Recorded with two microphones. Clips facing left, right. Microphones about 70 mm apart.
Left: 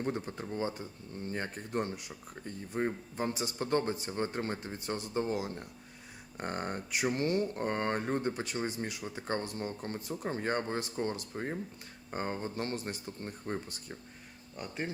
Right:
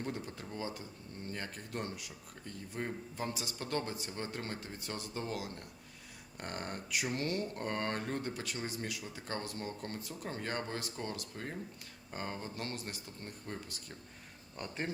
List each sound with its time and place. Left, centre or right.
0.0 s speech: left
14.5 s speech: centre